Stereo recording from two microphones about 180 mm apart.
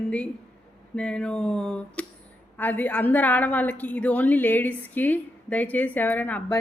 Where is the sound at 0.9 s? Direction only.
5° left (ahead or behind).